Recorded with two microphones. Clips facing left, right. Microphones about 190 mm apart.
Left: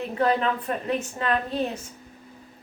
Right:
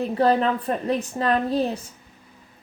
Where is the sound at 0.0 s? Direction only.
35° right (ahead or behind).